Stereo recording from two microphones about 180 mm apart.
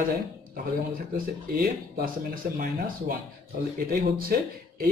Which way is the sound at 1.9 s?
50° right (ahead or behind).